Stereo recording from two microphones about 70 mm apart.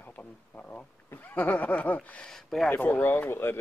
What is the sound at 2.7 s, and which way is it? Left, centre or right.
Speech, left.